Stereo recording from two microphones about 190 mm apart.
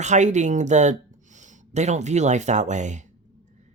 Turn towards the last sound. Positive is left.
turn(degrees=-40)  # may be behind; listen again after turning